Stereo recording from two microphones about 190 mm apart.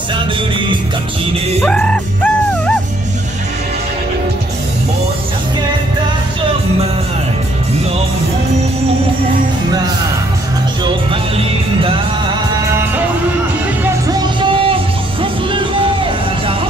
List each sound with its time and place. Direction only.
1.6 s music: 5° left (ahead or behind)
14.0 s music: 25° right (ahead or behind)